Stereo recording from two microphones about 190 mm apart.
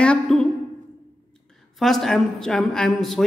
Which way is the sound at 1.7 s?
Centre (ahead or behind).